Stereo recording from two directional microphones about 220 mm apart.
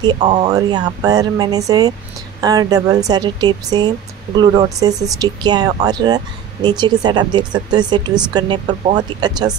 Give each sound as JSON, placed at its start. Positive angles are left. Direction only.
{"t": 0.2, "sound": "speech", "side_deg": -30}
{"t": 0.5, "sound": "speech", "side_deg": -15}